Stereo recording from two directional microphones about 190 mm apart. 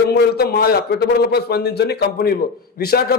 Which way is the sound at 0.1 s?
55° left (ahead or behind).